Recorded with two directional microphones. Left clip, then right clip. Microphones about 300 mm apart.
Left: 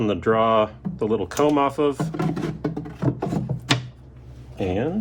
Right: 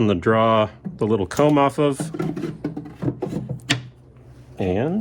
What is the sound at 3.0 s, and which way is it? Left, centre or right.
Wood, centre.